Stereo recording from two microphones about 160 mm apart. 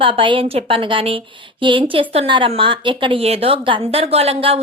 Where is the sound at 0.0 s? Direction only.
30° right (ahead or behind).